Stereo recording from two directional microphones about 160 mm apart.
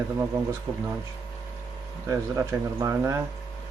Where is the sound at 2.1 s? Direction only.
20° right (ahead or behind).